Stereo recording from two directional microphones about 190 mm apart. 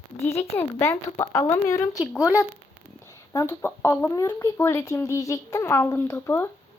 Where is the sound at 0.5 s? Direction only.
15° left (ahead or behind).